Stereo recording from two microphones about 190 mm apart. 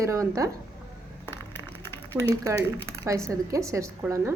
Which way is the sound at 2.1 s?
10° right (ahead or behind).